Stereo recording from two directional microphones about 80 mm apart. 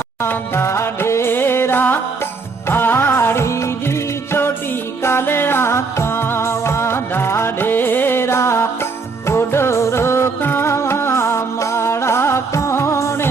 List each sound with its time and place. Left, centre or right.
0.2 s music: left